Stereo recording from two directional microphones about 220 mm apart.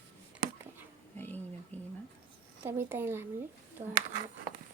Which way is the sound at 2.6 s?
10° right (ahead or behind).